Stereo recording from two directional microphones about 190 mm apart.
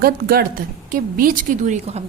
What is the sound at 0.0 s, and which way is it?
A woman's voice, 55° right (ahead or behind).